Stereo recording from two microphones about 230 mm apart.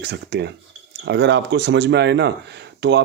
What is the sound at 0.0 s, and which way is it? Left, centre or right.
Speech, right.